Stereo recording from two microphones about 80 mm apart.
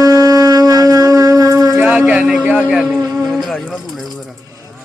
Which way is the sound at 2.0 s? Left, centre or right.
Centre.